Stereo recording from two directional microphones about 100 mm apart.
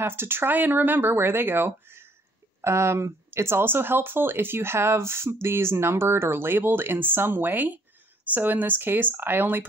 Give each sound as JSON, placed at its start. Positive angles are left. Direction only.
{"t": 0.0, "sound": "speech", "side_deg": -25}